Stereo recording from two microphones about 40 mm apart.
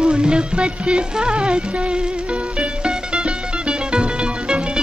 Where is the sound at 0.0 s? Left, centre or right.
Right.